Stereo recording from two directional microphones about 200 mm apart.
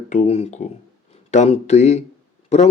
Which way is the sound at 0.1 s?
35° left (ahead or behind).